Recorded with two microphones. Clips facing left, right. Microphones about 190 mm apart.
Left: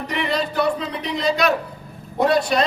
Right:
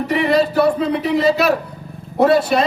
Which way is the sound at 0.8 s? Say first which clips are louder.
Right 9 dB; 55° right (ahead or behind).